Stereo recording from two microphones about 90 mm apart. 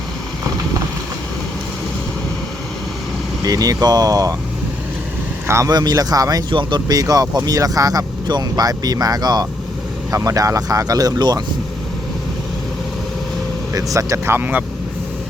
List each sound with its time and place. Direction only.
3.4 s speech: 40° right (ahead or behind)
5.5 s speech: 30° right (ahead or behind)
5.7 s speech: 45° right (ahead or behind)
6.5 s speech: 65° right (ahead or behind); by 11.4 s 50° right (ahead or behind)
13.7 s speech: 35° right (ahead or behind)
14.3 s speech: 20° right (ahead or behind)